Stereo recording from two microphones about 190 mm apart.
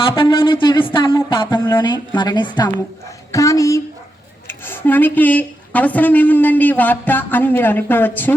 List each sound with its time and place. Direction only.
0.2 s a woman's voice: 25° left (ahead or behind); by 8.3 s 10° left (ahead or behind)